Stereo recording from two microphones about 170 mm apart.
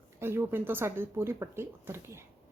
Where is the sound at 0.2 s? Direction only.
15° right (ahead or behind).